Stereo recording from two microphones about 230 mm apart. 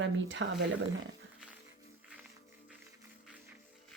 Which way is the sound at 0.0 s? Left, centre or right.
Right.